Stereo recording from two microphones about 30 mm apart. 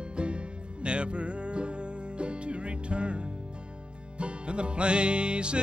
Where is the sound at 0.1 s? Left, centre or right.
Right.